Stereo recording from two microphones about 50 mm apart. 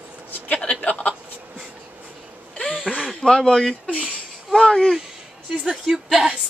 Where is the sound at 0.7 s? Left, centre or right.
Left.